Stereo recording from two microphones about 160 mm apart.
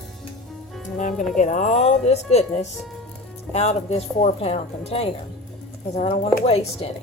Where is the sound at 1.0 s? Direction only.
55° left (ahead or behind); by 6.9 s 40° left (ahead or behind).